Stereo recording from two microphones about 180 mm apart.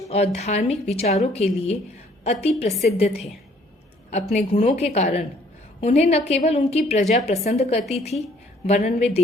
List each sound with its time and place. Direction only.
0.1 s a woman's voice: 35° left (ahead or behind)